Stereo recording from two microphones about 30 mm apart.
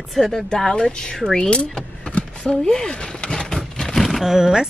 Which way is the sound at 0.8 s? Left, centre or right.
Left.